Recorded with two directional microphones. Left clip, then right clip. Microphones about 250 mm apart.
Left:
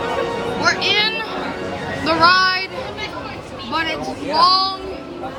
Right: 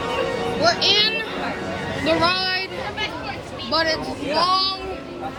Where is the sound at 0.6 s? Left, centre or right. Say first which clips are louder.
Even; centre.